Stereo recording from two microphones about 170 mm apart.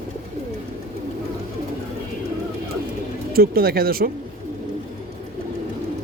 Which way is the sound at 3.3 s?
60° right (ahead or behind).